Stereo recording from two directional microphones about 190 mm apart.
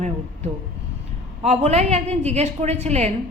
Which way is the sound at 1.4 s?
35° right (ahead or behind).